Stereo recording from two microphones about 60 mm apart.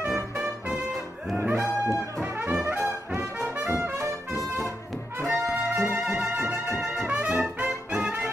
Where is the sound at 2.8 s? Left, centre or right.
Right.